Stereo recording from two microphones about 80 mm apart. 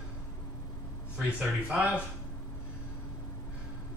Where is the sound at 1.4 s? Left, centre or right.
Centre.